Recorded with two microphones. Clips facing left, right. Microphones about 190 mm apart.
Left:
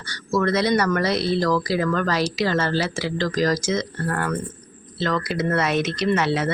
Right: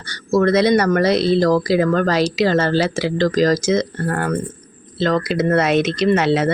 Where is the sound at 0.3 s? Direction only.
45° right (ahead or behind).